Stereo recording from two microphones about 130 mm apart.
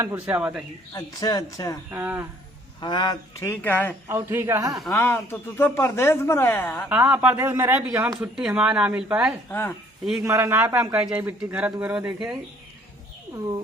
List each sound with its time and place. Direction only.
0.0 s a man's voice: 15° right (ahead or behind)
0.9 s speech: 30° left (ahead or behind)
1.9 s a man's voice: 15° right (ahead or behind)
2.8 s speech: 35° left (ahead or behind)
3.3 s speech: 20° left (ahead or behind)
4.1 s a man's voice: 20° right (ahead or behind)
4.9 s speech: 20° left (ahead or behind)
6.9 s a man's voice: 10° right (ahead or behind)
9.5 s speech: 15° left (ahead or behind)
10.2 s a man's voice: 20° right (ahead or behind)